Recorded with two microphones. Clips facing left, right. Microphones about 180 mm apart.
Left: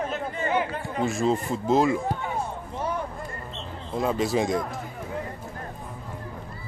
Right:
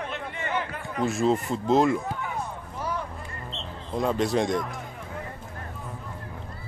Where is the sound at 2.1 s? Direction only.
30° left (ahead or behind).